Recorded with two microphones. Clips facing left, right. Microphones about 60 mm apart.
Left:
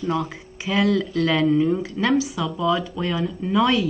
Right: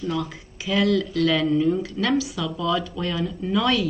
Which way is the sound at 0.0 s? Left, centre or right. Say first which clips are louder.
Left 3 dB; left.